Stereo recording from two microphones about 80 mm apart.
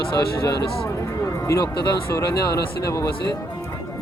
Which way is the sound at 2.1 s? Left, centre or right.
Left.